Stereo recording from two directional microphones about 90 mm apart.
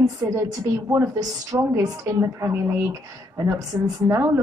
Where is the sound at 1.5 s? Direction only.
35° right (ahead or behind).